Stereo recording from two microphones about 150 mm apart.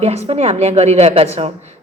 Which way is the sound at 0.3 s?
45° right (ahead or behind).